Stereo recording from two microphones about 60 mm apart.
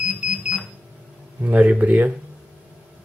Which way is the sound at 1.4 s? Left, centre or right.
Right.